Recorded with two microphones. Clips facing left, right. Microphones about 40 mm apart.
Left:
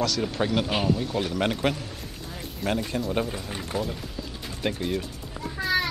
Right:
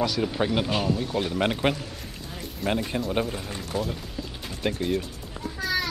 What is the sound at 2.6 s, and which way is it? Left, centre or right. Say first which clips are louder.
Speech: right 1 dB; centre.